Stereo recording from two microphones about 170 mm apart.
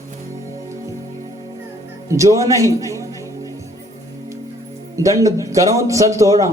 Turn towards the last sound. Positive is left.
turn(degrees=-20)  # may be behind; listen again after turning